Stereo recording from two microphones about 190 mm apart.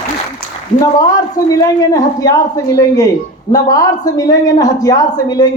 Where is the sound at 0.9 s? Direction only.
20° left (ahead or behind).